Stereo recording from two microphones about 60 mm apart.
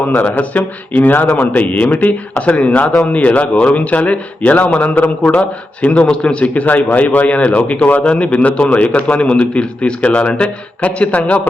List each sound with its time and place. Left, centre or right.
0.2 s a man's voice: left
2.8 s a man's voice: centre
3.1 s a man's voice: left